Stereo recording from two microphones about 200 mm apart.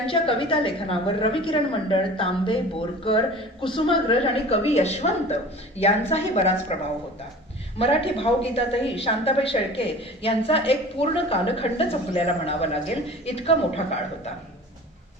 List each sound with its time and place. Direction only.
0.1 s a woman's voice: 25° left (ahead or behind)